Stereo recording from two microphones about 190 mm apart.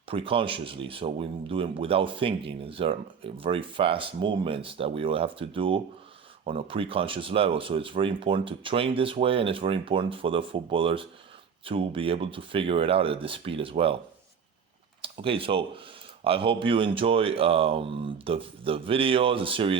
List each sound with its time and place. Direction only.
0.1 s speech: 30° right (ahead or behind)
15.0 s speech: 30° right (ahead or behind)